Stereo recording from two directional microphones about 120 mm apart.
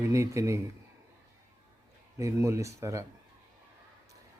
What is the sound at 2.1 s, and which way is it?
Speech, 25° right (ahead or behind).